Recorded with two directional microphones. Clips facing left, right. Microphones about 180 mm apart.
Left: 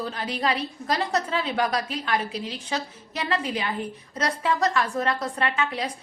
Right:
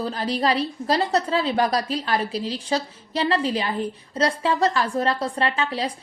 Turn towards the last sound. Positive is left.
turn(degrees=-30)  # may be behind; listen again after turning